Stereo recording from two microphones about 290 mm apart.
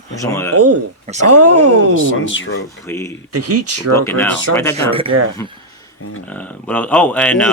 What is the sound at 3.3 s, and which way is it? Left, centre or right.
Speech, right.